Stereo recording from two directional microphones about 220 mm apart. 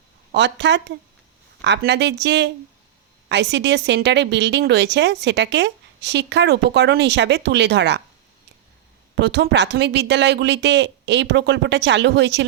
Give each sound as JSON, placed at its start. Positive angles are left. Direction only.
{"t": 0.3, "sound": "speech", "side_deg": -55}
{"t": 9.2, "sound": "speech", "side_deg": -50}